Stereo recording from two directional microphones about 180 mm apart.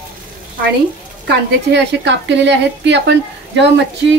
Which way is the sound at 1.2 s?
75° right (ahead or behind).